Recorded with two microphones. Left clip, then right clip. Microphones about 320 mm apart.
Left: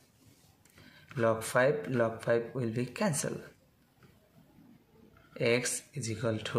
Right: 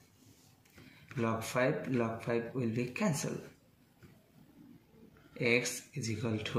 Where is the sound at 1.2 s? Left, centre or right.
Left.